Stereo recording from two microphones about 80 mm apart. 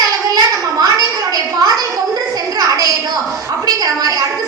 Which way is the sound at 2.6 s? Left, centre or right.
Right.